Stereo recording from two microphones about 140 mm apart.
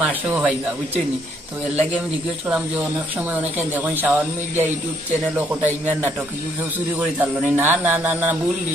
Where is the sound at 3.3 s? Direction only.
10° right (ahead or behind).